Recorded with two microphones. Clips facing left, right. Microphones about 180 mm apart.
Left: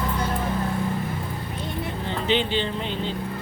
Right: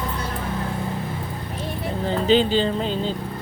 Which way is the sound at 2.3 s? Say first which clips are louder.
Right 5 dB; 35° right (ahead or behind).